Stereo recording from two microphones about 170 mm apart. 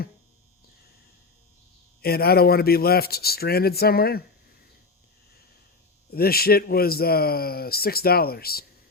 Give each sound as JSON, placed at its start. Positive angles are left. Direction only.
{"t": 2.0, "sound": "a man's voice", "side_deg": 65}
{"t": 6.1, "sound": "a man's voice", "side_deg": 65}